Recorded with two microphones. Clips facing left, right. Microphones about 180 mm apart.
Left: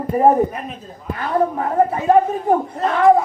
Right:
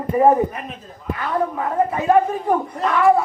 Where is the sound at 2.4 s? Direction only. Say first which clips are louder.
Left 2 dB; 30° left (ahead or behind).